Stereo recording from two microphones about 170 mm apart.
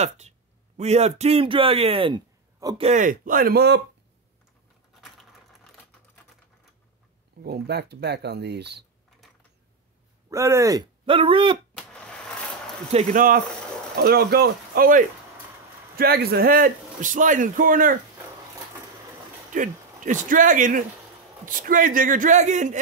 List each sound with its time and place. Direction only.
0.7 s speech: 40° right (ahead or behind)
2.9 s a man's voice: 50° right (ahead or behind); by 3.8 s 75° right (ahead or behind)
5.0 s typing: centre (ahead or behind)
7.4 s speech: 70° right (ahead or behind)
10.3 s speech: 15° right (ahead or behind)
11.7 s a sound: 5° left (ahead or behind)
13.1 s a man's voice: 55° right (ahead or behind)
19.5 s a man's voice: 50° right (ahead or behind)